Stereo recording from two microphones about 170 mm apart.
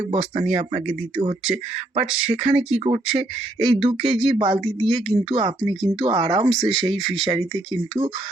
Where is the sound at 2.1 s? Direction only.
5° right (ahead or behind).